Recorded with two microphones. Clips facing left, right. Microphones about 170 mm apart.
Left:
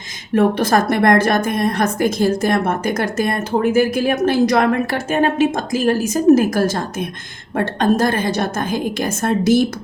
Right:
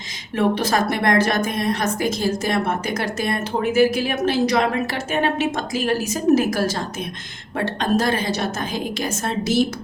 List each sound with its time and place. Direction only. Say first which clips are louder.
0.3 s a woman's voice: left 5 dB; 50° left (ahead or behind)